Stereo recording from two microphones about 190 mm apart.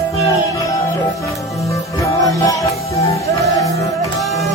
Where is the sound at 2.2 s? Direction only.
15° left (ahead or behind).